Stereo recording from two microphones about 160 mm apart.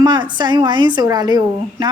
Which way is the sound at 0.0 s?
25° right (ahead or behind).